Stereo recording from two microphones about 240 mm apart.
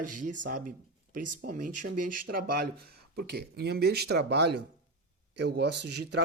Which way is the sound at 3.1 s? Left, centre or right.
Right.